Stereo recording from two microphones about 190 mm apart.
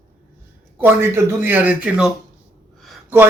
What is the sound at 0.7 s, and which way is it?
Speech, 10° right (ahead or behind).